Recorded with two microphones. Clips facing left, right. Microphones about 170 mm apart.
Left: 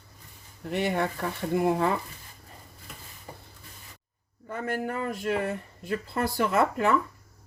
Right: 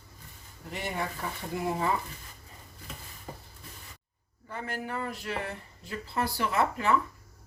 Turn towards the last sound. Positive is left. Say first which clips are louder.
# left 3 dB
turn(degrees=55)  # may be behind; listen again after turning